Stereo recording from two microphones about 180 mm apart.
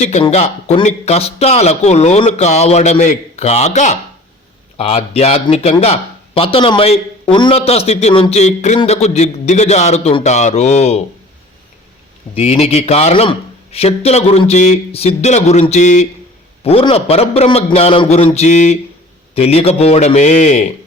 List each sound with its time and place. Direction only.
0.0 s speech: 35° left (ahead or behind)
12.3 s speech: 35° left (ahead or behind)